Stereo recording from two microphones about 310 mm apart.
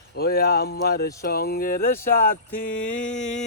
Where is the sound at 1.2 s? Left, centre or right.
Left.